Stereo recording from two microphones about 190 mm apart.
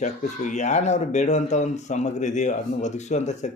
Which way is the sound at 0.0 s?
40° left (ahead or behind).